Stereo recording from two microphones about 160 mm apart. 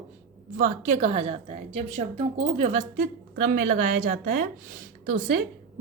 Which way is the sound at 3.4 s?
60° right (ahead or behind).